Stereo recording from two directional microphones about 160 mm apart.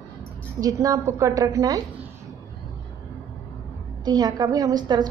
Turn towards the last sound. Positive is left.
turn(degrees=-25)  # may be behind; listen again after turning